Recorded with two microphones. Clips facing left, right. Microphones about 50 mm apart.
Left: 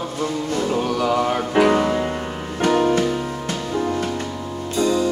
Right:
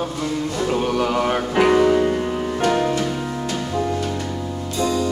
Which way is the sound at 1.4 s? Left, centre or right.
Centre.